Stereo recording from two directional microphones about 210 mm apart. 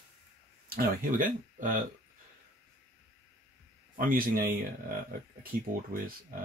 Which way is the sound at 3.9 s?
40° right (ahead or behind).